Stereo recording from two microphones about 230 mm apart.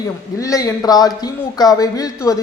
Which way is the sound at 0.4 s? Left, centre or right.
Centre.